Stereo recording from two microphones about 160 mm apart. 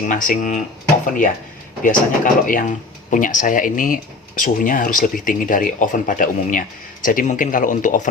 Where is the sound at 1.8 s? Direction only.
55° left (ahead or behind).